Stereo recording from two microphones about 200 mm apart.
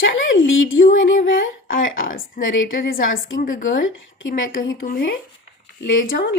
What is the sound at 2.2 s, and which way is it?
Speech, 40° left (ahead or behind).